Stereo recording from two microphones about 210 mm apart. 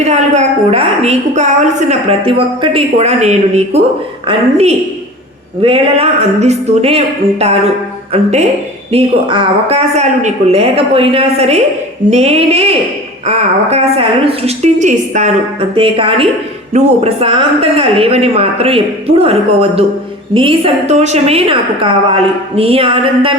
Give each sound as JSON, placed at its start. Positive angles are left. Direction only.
{"t": 0.0, "sound": "a woman's voice", "side_deg": -30}